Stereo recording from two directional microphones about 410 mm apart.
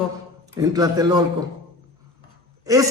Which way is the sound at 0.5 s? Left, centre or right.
Centre.